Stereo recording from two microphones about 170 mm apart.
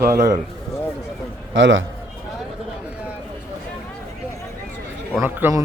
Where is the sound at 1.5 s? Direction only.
90° right.